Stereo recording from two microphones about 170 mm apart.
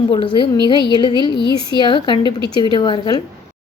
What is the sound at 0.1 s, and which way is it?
A woman's voice, 30° left (ahead or behind).